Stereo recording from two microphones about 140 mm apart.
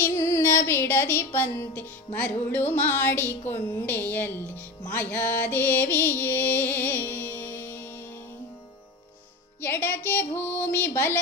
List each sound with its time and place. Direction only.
0.0 s a sound: 15° left (ahead or behind)
2.1 s speech: 10° left (ahead or behind)
4.9 s music: 10° left (ahead or behind)
9.6 s speech: 15° left (ahead or behind)